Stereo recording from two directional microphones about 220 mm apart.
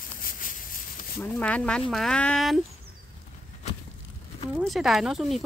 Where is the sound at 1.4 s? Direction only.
5° left (ahead or behind).